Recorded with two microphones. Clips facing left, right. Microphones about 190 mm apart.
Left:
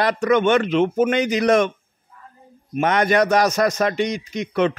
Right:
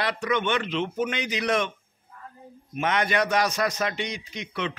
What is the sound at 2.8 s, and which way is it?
A man's voice, 45° left (ahead or behind).